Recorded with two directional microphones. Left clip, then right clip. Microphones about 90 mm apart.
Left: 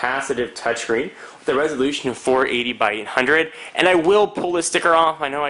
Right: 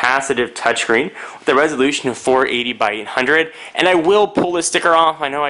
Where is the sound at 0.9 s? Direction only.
35° right (ahead or behind).